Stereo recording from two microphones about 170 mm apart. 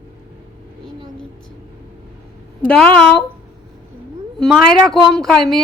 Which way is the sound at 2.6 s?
10° left (ahead or behind).